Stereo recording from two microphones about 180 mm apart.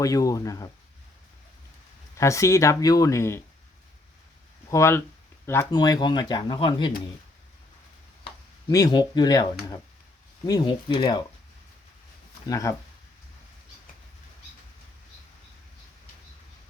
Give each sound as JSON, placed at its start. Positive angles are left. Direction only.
{"t": 0.0, "sound": "speech", "side_deg": 20}
{"t": 2.1, "sound": "speech", "side_deg": 15}
{"t": 4.7, "sound": "speech", "side_deg": 15}
{"t": 8.7, "sound": "speech", "side_deg": 20}
{"t": 12.5, "sound": "speech", "side_deg": 20}